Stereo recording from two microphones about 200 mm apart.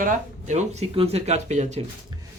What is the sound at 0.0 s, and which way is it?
Speech, 40° right (ahead or behind).